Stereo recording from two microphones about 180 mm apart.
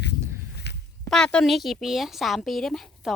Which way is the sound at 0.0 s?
65° left (ahead or behind).